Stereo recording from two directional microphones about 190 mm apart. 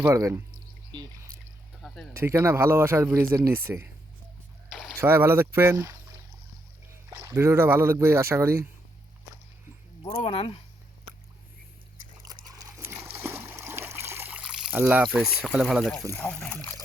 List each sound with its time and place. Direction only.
0.0 s speech: 15° right (ahead or behind)
2.1 s speech: 15° right (ahead or behind)
4.9 s speech: 10° right (ahead or behind)
7.1 s speech: 15° right (ahead or behind)
10.0 s speech: 25° left (ahead or behind)
12.3 s splash: 20° right (ahead or behind); by 16.0 s centre (ahead or behind)
16.1 s speech: 10° left (ahead or behind)